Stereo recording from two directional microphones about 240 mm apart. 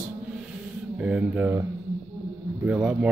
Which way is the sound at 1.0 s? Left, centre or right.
Centre.